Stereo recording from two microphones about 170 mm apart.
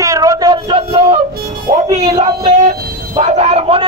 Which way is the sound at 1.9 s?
20° right (ahead or behind).